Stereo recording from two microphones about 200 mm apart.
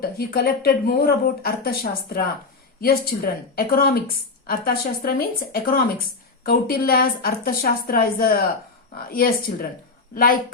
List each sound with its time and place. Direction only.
0.0 s a woman's voice: 50° left (ahead or behind)